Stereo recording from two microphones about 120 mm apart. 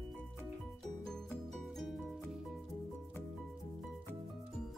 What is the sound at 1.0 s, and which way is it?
Music, 5° left (ahead or behind).